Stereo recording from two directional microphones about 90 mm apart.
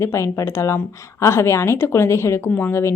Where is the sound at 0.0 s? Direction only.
35° left (ahead or behind).